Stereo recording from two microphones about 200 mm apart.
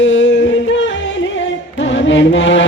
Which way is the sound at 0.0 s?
70° left (ahead or behind).